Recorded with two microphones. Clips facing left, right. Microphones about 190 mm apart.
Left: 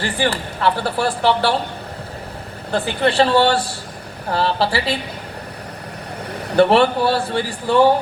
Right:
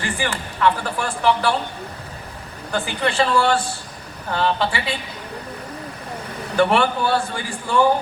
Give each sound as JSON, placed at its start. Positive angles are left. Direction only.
{"t": 0.0, "sound": "speech", "side_deg": 35}
{"t": 2.7, "sound": "speech", "side_deg": 35}
{"t": 6.6, "sound": "speech", "side_deg": 35}